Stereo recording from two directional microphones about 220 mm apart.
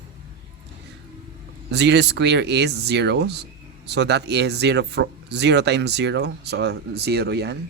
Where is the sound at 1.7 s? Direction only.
50° right (ahead or behind).